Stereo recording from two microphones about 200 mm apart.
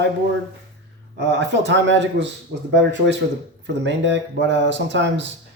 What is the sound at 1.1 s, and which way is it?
Speech, 60° right (ahead or behind).